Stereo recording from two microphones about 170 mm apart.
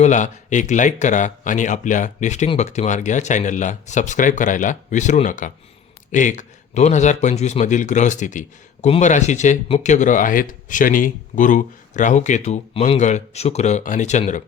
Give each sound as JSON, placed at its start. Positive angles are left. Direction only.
{"t": 0.0, "sound": "speech", "side_deg": 45}